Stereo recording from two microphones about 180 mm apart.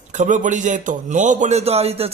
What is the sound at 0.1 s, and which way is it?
A man's voice, 45° right (ahead or behind).